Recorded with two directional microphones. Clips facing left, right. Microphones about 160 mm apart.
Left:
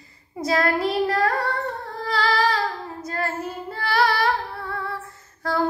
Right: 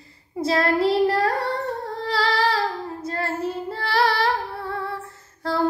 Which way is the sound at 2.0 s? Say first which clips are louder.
Left 1 dB; 30° right (ahead or behind).